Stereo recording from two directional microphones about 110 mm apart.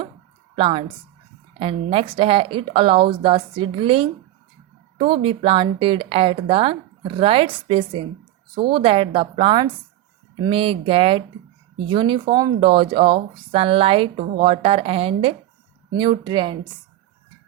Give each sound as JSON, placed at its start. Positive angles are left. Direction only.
{"t": 0.5, "sound": "a woman's voice", "side_deg": -55}
{"t": 11.9, "sound": "speech", "side_deg": -50}
{"t": 16.0, "sound": "a woman's voice", "side_deg": -45}